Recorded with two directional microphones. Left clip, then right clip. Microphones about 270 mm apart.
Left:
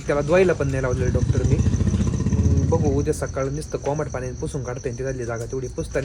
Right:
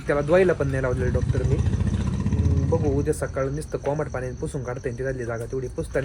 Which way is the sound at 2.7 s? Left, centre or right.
Centre.